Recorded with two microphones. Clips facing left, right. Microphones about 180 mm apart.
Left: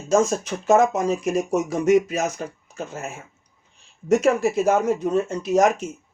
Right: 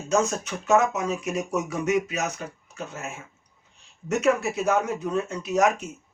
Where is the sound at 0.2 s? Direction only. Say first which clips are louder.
Left 4 dB; 35° left (ahead or behind).